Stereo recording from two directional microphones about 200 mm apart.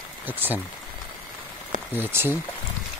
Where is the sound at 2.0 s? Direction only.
10° right (ahead or behind).